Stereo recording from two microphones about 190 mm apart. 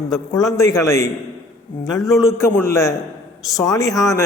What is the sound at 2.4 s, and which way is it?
A man's voice, 15° left (ahead or behind).